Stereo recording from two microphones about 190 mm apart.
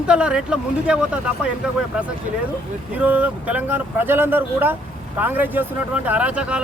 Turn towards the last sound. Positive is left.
turn(degrees=-5)  # may be behind; listen again after turning